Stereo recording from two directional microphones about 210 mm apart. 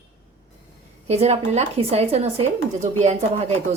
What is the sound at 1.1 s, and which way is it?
Speech, 30° right (ahead or behind).